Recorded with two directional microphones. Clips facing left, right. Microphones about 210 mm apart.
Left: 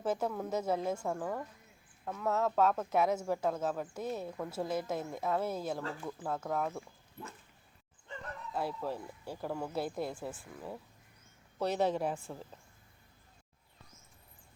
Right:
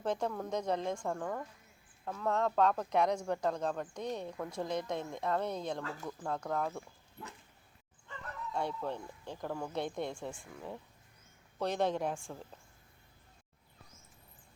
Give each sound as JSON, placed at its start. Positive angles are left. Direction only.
{"t": 0.0, "sound": "speech", "side_deg": 5}
{"t": 8.5, "sound": "a woman's voice", "side_deg": 5}